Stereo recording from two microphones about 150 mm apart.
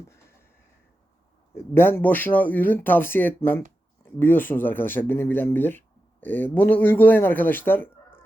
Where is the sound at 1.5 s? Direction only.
15° left (ahead or behind).